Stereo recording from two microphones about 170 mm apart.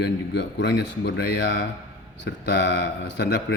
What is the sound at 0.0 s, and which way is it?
Speech, 80° left.